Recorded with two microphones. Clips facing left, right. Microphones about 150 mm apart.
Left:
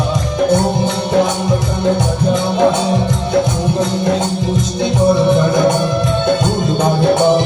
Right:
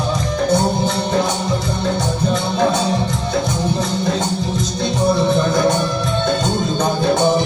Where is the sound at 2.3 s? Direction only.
20° left (ahead or behind).